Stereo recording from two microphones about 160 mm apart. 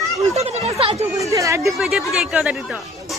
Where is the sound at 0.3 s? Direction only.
40° right (ahead or behind).